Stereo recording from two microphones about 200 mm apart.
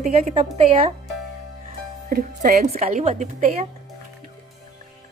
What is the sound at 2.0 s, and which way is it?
Speech, 45° right (ahead or behind).